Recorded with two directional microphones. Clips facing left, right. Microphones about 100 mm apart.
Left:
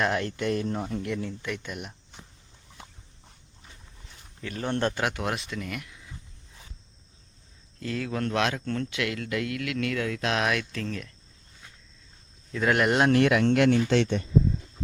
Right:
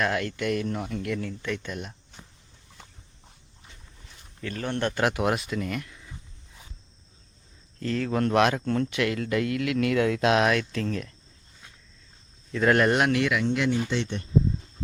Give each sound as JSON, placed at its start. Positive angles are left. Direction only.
{"t": 0.0, "sound": "speech", "side_deg": 25}
{"t": 4.0, "sound": "a sound", "side_deg": 0}
{"t": 4.7, "sound": "speech", "side_deg": 30}
{"t": 4.9, "sound": "speech", "side_deg": -5}
{"t": 7.8, "sound": "speech", "side_deg": 5}
{"t": 9.9, "sound": "speech", "side_deg": -20}
{"t": 10.3, "sound": "speech", "side_deg": 0}
{"t": 12.5, "sound": "speech", "side_deg": 5}
{"t": 13.1, "sound": "speech", "side_deg": 45}
{"t": 13.4, "sound": "speech", "side_deg": 65}